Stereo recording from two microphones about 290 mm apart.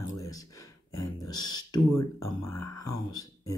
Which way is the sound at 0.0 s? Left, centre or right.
Centre.